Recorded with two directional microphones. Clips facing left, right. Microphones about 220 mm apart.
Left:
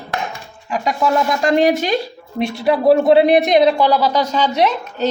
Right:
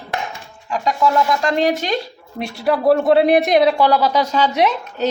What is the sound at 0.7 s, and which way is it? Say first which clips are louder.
A man's voice: even; 10° left (ahead or behind).